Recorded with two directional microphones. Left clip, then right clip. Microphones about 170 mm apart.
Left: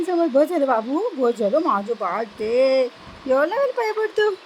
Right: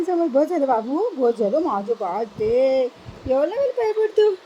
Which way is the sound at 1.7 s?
55° left (ahead or behind).